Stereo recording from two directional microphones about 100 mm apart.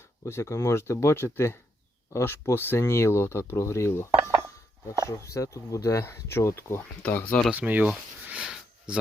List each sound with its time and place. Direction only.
0.3 s speech: 30° left (ahead or behind)
5.0 s speech: 30° left (ahead or behind)
7.5 s speech: 15° right (ahead or behind)
8.2 s a sound: 10° right (ahead or behind)